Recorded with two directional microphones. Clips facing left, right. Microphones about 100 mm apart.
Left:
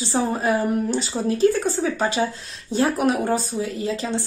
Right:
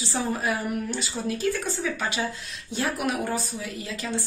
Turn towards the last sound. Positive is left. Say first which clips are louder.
# left 7 dB
turn(degrees=30)  # may be behind; listen again after turning